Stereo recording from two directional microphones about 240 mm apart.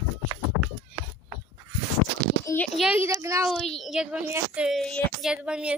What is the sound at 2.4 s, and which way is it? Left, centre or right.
A child's voice, centre.